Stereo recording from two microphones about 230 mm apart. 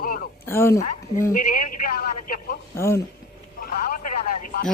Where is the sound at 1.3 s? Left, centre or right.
Left.